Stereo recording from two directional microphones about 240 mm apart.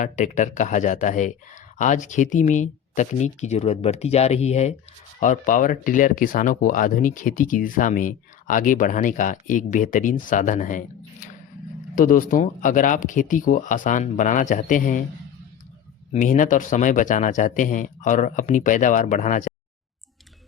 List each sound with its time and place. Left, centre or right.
0.0 s speech: left
16.1 s speech: left